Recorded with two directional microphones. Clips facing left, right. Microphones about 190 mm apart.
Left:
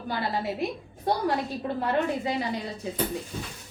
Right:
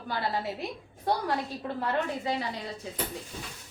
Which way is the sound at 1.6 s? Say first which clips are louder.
Left 5 dB; 20° left (ahead or behind).